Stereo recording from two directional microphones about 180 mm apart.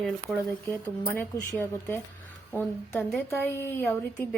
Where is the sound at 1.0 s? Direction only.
10° left (ahead or behind).